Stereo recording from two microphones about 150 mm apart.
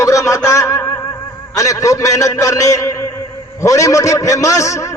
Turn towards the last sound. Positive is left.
turn(degrees=20)  # may be behind; listen again after turning